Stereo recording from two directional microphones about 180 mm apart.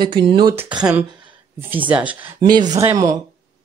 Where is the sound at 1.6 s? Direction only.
10° right (ahead or behind).